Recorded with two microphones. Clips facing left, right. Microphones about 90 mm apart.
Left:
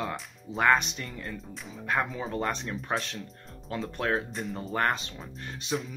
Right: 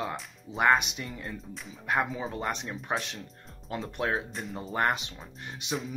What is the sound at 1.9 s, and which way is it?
Speech, 15° right (ahead or behind).